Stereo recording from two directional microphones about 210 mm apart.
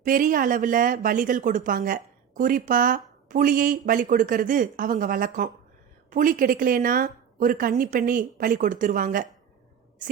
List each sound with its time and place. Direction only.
0.0 s speech: 40° right (ahead or behind)